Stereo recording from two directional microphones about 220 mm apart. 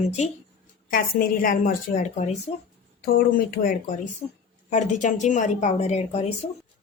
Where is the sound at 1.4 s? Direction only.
35° left (ahead or behind).